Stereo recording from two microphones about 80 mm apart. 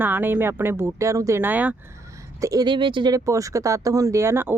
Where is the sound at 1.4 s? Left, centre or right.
Right.